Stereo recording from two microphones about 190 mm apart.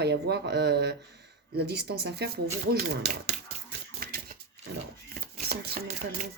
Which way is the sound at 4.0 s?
50° right (ahead or behind).